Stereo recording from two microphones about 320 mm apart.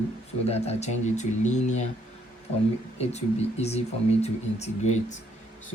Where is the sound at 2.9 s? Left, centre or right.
Centre.